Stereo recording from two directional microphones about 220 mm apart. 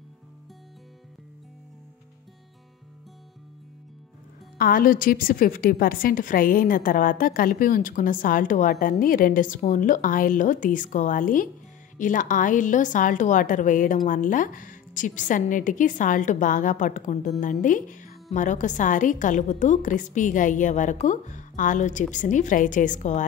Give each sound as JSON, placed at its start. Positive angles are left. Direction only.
{"t": 4.6, "sound": "a woman's voice", "side_deg": 40}